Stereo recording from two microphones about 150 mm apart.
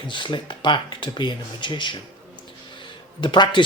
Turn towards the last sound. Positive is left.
turn(degrees=30)  # may be behind; listen again after turning